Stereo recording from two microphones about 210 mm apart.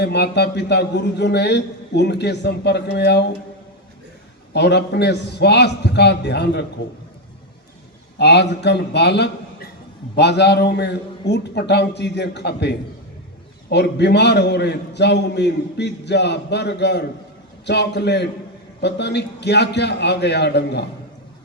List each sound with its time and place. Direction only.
0.0 s a man's voice: 50° left (ahead or behind)
4.5 s a man's voice: 55° left (ahead or behind)
8.2 s a man's voice: 55° left (ahead or behind)